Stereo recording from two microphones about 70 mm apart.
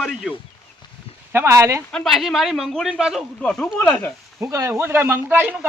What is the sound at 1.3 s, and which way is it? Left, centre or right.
Speech, right.